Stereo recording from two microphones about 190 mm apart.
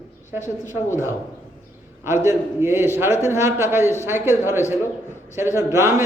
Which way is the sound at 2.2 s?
15° right (ahead or behind).